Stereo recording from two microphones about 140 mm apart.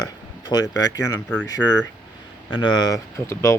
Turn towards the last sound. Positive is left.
turn(degrees=20)  # may be behind; listen again after turning